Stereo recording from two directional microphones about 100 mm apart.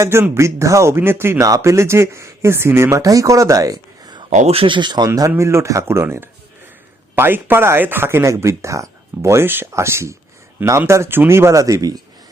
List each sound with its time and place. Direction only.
0.0 s speech: 25° right (ahead or behind)
4.4 s speech: 65° right (ahead or behind); by 12.0 s 40° right (ahead or behind)